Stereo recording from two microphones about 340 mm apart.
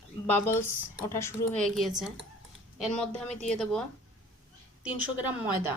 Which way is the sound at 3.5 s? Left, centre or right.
Centre.